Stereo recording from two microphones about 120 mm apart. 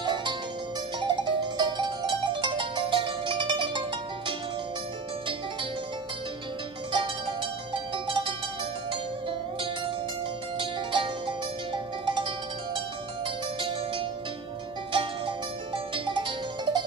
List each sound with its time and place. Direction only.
0.0 s music: 40° right (ahead or behind)
6.9 s music: 40° right (ahead or behind)
10.6 s music: 45° right (ahead or behind)